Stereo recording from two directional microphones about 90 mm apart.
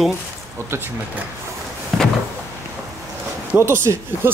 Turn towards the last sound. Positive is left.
turn(degrees=-30)  # may be behind; listen again after turning